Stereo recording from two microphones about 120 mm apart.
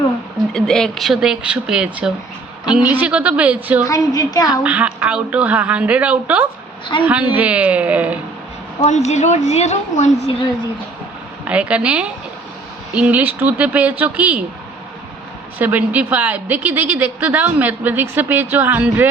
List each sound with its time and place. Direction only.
0.5 s a woman's voice: 5° left (ahead or behind)
3.8 s a woman's voice: 30° left (ahead or behind)
4.6 s a woman's voice: 10° right (ahead or behind)
8.8 s a woman's voice: 75° left (ahead or behind)
11.4 s a woman's voice: 10° right (ahead or behind)
15.5 s a woman's voice: 15° right (ahead or behind)